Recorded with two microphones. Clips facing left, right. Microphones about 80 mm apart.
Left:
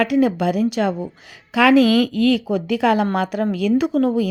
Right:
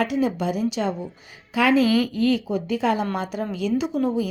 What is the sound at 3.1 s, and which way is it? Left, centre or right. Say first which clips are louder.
Speech: left 6 dB; left.